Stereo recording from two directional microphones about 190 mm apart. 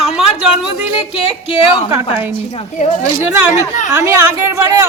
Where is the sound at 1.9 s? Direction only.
10° right (ahead or behind).